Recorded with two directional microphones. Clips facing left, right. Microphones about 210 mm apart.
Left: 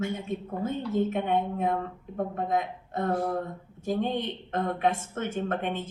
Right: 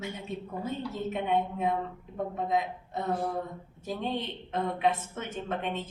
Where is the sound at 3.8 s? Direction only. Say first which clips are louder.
Left 5 dB; 55° left (ahead or behind).